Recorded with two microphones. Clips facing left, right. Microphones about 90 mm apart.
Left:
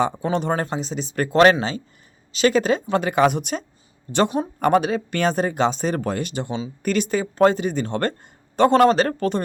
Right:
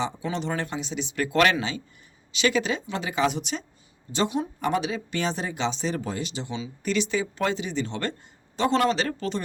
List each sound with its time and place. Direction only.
0.0 s speech: 50° left (ahead or behind)